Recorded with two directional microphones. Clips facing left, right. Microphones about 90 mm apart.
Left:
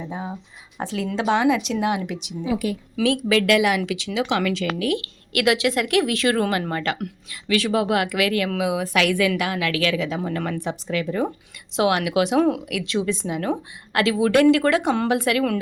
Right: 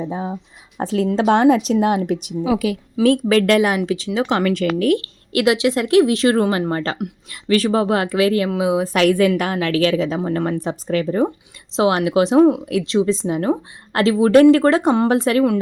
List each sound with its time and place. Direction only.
0.0 s a woman's voice: 20° right (ahead or behind)
0.8 s speech: 40° right (ahead or behind)
2.7 s a woman's voice: 90° right
3.0 s speech: 45° right (ahead or behind)
5.3 s a woman's voice: 25° right (ahead or behind)